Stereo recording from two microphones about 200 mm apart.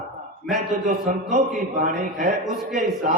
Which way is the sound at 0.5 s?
40° right (ahead or behind).